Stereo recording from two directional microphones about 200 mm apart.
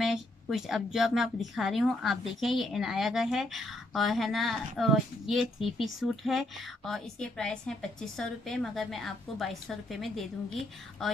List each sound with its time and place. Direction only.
0.0 s a woman's voice: centre (ahead or behind)